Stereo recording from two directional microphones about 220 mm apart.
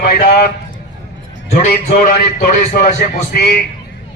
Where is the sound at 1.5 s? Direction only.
35° left (ahead or behind).